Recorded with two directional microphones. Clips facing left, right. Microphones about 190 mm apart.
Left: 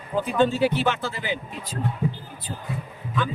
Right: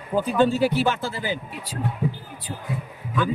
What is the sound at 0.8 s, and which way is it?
Speech, 45° right (ahead or behind).